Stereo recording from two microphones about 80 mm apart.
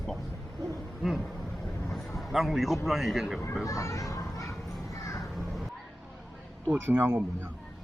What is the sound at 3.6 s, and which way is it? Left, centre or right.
Speech, left.